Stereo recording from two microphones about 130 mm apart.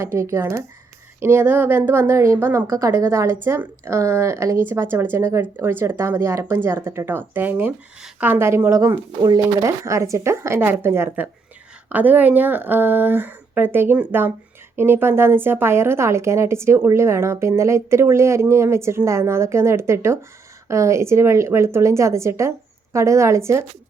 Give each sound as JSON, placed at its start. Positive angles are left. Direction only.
{"t": 0.0, "sound": "a woman's voice", "side_deg": -20}